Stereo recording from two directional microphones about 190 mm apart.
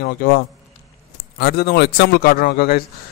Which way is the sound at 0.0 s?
50° left (ahead or behind).